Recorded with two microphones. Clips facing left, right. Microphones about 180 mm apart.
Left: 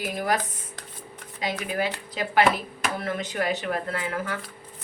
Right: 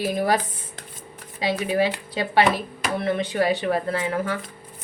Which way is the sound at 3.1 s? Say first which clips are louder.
Right 7 dB; 30° right (ahead or behind).